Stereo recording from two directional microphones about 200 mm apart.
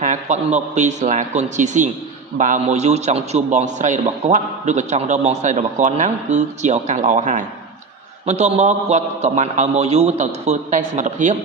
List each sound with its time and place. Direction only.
0.0 s a man's voice: 35° right (ahead or behind)